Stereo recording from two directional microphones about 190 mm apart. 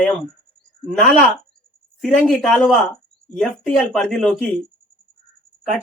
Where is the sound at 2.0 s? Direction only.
Centre (ahead or behind).